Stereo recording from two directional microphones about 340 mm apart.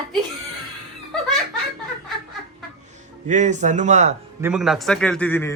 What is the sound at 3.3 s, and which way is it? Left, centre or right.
Speech, right.